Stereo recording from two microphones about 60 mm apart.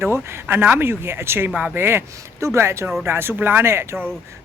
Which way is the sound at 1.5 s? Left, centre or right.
Right.